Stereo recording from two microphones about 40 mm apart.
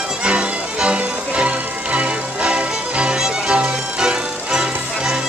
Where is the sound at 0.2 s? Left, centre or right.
Right.